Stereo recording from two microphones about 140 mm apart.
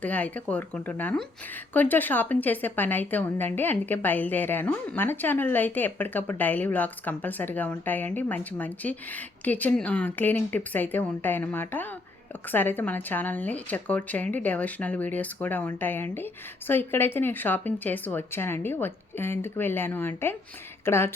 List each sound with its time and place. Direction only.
0.0 s speech: 10° left (ahead or behind)